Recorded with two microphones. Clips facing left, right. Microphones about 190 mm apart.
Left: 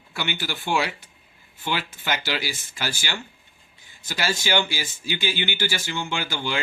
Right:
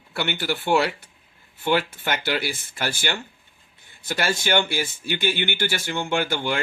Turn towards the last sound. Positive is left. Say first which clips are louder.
# right 5 dB
turn(degrees=-55)  # may be behind; listen again after turning